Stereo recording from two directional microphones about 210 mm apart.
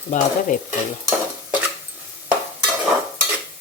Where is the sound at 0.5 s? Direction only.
35° left (ahead or behind).